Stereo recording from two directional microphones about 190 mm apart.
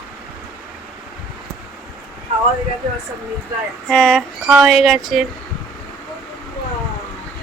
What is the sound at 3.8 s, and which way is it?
Speech, 5° left (ahead or behind).